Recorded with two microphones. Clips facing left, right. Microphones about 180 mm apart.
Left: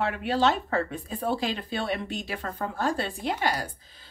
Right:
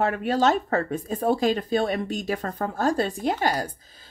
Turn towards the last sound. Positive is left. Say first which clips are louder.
# right 5 dB
turn(degrees=-45)  # may be behind; listen again after turning